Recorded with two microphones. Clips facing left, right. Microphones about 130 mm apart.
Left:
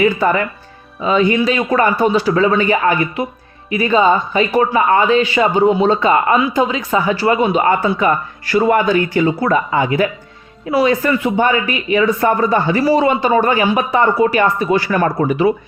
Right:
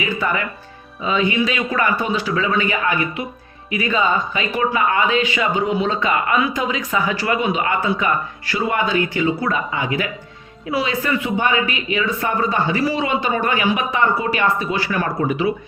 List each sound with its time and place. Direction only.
0.0 s speech: 35° left (ahead or behind)